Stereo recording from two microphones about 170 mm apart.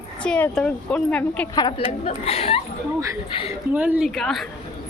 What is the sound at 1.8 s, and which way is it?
Speech, 35° left (ahead or behind).